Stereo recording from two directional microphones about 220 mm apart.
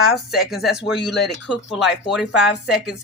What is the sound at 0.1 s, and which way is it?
Speech, centre (ahead or behind).